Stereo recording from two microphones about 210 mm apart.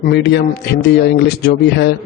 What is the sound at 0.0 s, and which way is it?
A man's voice, 50° left (ahead or behind).